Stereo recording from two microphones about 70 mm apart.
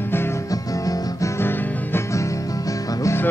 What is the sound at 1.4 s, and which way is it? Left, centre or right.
Music, left.